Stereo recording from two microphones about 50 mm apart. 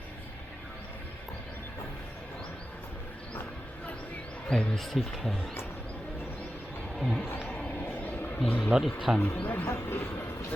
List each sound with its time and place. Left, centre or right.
4.4 s speech: centre
4.7 s speech: centre
7.0 s speech: centre
7.7 s a sound: left
8.4 s speech: left
9.0 s speech: centre
9.4 s speech: left
9.6 s speech: left